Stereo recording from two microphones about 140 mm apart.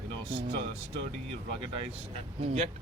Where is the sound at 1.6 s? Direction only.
40° right (ahead or behind).